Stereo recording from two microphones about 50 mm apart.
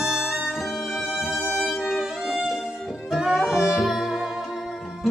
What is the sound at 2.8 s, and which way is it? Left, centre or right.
Music, centre.